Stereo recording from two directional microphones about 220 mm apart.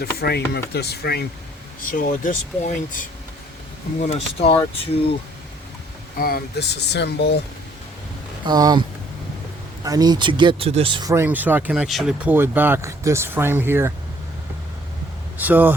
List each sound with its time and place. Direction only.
0.0 s speech: 45° left (ahead or behind)
4.0 s speech: 30° left (ahead or behind)
6.1 s speech: 45° left (ahead or behind)
8.4 s speech: 20° right (ahead or behind)
9.8 s speech: 15° right (ahead or behind)
15.4 s speech: 10° right (ahead or behind)